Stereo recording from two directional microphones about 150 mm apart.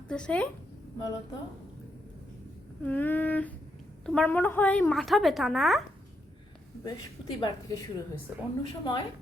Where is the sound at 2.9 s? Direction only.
10° left (ahead or behind).